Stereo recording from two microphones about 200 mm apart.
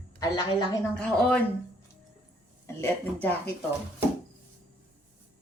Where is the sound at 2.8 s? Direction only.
10° left (ahead or behind).